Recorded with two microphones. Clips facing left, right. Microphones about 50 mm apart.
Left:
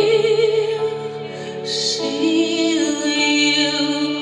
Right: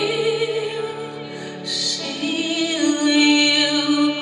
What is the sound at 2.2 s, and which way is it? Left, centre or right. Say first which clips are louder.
Music: left 5 dB; right.